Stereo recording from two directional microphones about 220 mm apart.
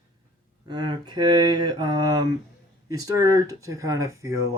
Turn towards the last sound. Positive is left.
turn(degrees=-15)  # may be behind; listen again after turning